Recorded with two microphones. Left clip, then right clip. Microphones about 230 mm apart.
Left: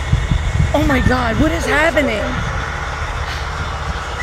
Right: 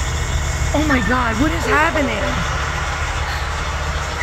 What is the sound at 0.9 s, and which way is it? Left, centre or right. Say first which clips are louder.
Speech: left 1 dB; left.